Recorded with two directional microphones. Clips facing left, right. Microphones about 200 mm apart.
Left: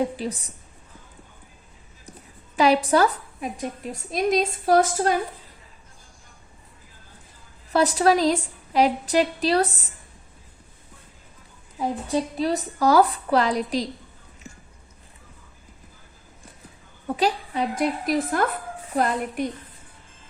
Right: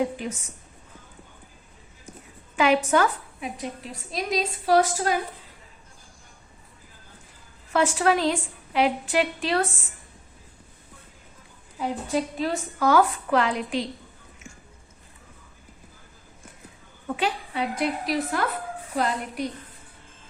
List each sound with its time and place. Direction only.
0.2 s a woman's voice: 35° left (ahead or behind)
2.6 s a woman's voice: 35° left (ahead or behind)
7.7 s a woman's voice: 35° left (ahead or behind)
12.4 s a woman's voice: 35° left (ahead or behind)
17.2 s a woman's voice: 40° left (ahead or behind)